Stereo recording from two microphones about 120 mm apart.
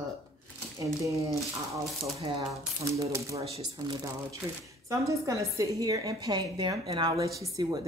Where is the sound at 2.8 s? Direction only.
25° right (ahead or behind).